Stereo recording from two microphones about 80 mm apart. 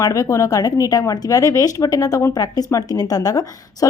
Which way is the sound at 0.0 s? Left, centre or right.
Left.